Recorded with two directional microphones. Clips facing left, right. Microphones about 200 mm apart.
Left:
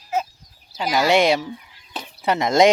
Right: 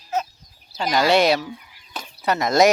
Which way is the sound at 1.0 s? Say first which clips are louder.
Even; 20° left (ahead or behind).